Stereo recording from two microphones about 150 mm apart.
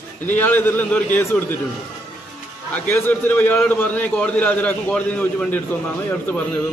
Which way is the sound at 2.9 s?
15° left (ahead or behind).